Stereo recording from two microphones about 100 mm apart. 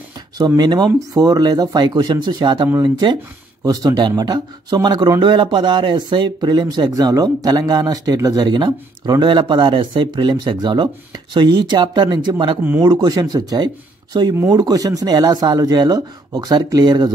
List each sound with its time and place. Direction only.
0.6 s speech: 45° right (ahead or behind)
3.6 s speech: 40° right (ahead or behind)